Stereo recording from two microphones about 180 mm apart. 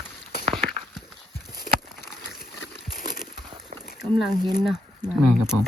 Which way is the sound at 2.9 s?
50° left (ahead or behind).